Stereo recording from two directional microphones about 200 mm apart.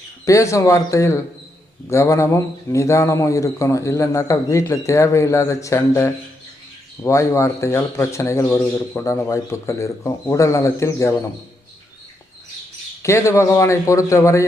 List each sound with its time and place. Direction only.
0.3 s speech: 15° left (ahead or behind)
13.0 s speech: 15° left (ahead or behind)